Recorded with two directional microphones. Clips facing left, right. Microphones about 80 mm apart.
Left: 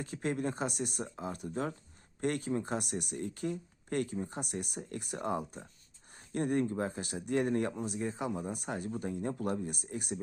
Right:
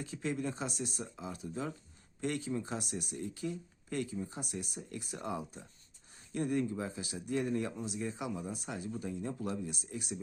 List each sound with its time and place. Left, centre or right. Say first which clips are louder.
0.0 s speech: left 2 dB; left
7.9 s speech: left 3 dB; left
8.3 s speech: left 3 dB; left